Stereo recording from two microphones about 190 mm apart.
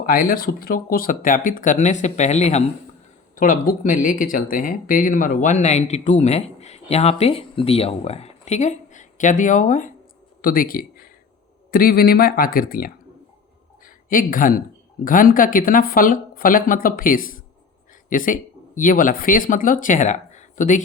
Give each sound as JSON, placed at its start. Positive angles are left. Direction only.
{"t": 0.0, "sound": "speech", "side_deg": 50}